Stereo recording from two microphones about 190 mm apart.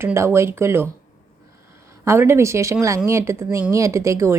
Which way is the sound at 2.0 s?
15° right (ahead or behind).